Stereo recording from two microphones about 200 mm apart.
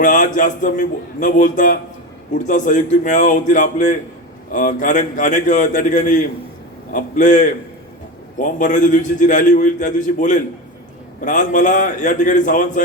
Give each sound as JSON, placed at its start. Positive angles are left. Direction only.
{"t": 0.0, "sound": "a man's voice", "side_deg": 40}